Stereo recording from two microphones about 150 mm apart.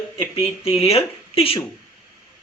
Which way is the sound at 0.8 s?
40° left (ahead or behind).